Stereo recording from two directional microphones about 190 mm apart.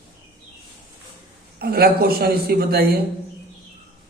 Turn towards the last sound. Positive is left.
turn(degrees=-55)  # may be behind; listen again after turning